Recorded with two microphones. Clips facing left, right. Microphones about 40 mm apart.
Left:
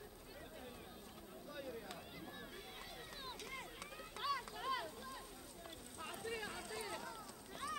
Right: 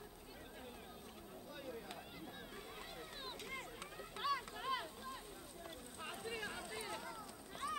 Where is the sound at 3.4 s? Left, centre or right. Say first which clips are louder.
Right 1 dB; centre; by 6.9 s right.